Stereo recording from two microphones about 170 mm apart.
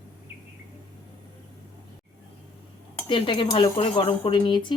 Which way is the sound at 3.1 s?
30° left (ahead or behind).